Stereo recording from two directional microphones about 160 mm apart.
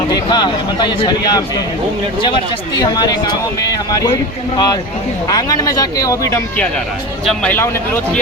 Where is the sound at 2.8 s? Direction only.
25° left (ahead or behind).